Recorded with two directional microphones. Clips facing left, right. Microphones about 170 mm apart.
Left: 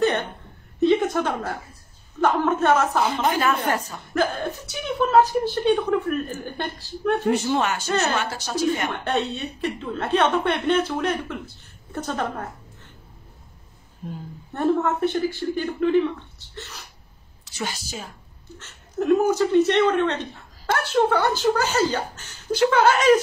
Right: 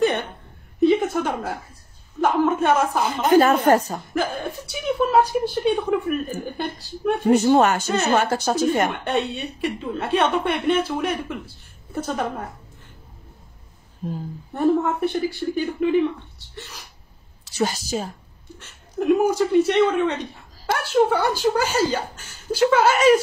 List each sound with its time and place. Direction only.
0.0 s a sound: 10° right (ahead or behind)
2.2 s a woman's voice: 10° right (ahead or behind)
3.3 s speech: 45° right (ahead or behind)
4.1 s a woman's voice: 10° right (ahead or behind)
7.4 s speech: 45° right (ahead or behind)
9.0 s a woman's voice: 10° right (ahead or behind)
14.5 s a woman's voice: 10° right (ahead or behind)
17.6 s a woman's voice: 35° right (ahead or behind)
18.6 s a woman's voice: 10° right (ahead or behind)